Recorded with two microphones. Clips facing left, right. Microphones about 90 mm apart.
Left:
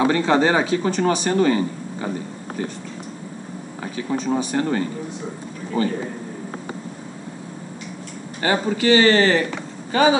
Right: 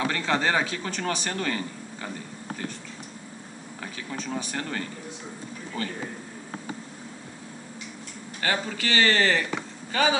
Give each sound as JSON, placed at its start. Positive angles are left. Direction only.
{"t": 0.0, "sound": "speech", "side_deg": 20}
{"t": 3.8, "sound": "speech", "side_deg": 20}
{"t": 8.4, "sound": "speech", "side_deg": 20}